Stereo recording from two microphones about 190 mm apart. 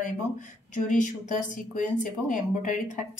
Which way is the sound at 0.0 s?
40° left (ahead or behind).